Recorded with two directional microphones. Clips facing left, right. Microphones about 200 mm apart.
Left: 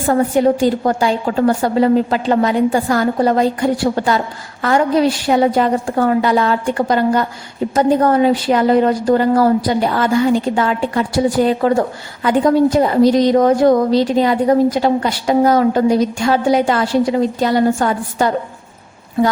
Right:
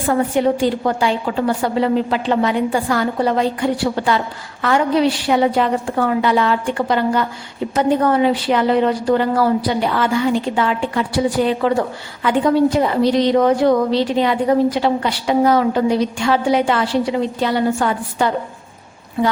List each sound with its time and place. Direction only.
0.1 s a woman's voice: 40° left (ahead or behind)